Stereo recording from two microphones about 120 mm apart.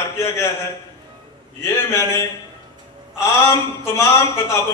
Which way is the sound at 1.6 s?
20° left (ahead or behind).